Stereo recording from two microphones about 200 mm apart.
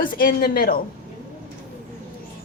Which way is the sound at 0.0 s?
45° left (ahead or behind).